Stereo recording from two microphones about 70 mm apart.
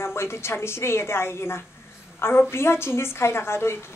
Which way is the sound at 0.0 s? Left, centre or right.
Left.